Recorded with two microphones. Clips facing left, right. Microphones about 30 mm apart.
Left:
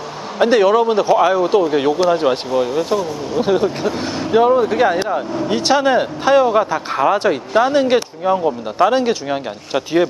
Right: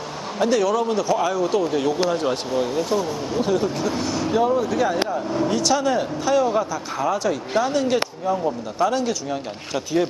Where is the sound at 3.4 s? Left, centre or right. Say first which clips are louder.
Left 6 dB; left.